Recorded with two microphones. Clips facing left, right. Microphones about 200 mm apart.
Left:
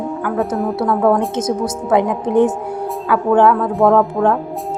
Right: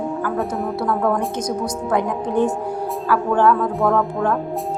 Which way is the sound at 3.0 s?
20° left (ahead or behind).